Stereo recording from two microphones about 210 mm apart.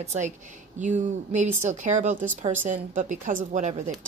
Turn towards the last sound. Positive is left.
turn(degrees=-35)  # may be behind; listen again after turning